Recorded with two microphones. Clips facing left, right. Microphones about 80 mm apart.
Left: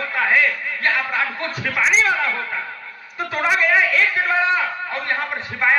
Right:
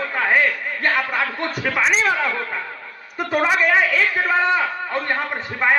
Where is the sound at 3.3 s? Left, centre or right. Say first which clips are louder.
Right 1 dB; right.